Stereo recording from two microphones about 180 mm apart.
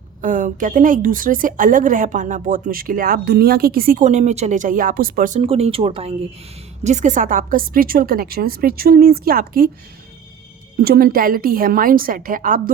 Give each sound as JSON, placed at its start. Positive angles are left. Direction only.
{"t": 0.2, "sound": "a woman's voice", "side_deg": -45}
{"t": 5.4, "sound": "a woman's voice", "side_deg": -35}
{"t": 10.8, "sound": "a woman's voice", "side_deg": -55}